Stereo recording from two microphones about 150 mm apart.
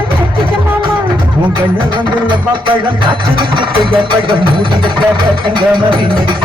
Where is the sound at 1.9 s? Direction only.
30° right (ahead or behind).